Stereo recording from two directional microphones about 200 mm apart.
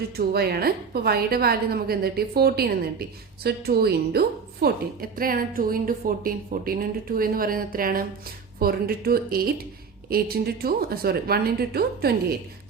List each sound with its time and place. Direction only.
0.2 s a woman's voice: 50° right (ahead or behind)